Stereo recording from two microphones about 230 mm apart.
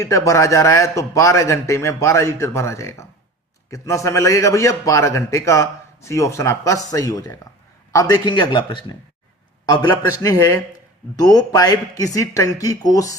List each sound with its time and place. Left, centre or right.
0.0 s a man's voice: centre